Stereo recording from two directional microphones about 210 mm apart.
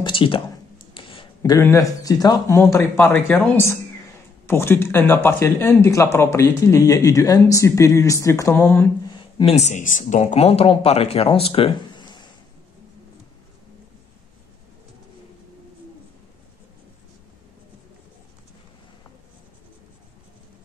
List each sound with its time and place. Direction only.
0.0 s a sound: 25° left (ahead or behind)
1.4 s speech: 15° left (ahead or behind)
9.1 s speech: 25° left (ahead or behind)